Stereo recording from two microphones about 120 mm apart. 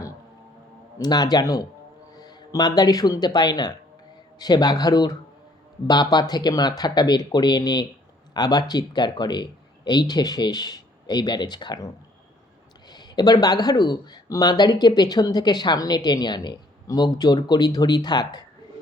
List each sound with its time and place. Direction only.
0.9 s speech: 35° left (ahead or behind)
12.9 s speech: 35° left (ahead or behind)